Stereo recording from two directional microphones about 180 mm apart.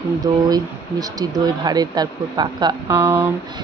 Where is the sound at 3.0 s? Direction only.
10° right (ahead or behind).